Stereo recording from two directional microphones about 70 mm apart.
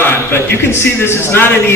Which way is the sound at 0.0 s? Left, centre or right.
Left.